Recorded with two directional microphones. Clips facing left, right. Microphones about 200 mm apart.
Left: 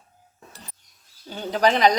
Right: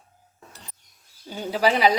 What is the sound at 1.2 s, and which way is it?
Speech, 10° right (ahead or behind).